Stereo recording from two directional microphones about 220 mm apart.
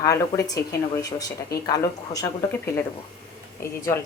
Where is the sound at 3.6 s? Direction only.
10° left (ahead or behind).